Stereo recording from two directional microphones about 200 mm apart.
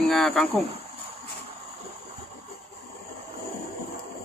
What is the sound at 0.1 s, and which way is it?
Cricket, centre (ahead or behind).